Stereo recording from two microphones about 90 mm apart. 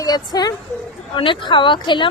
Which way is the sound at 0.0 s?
50° left (ahead or behind).